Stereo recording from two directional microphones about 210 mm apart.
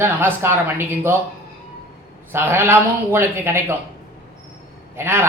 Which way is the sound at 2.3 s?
10° right (ahead or behind).